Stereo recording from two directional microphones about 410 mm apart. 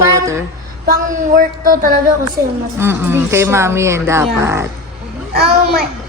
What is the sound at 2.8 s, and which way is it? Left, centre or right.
A woman's voice, centre.